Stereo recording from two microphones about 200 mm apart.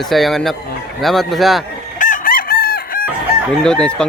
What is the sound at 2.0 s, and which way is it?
Chicken, 45° left (ahead or behind).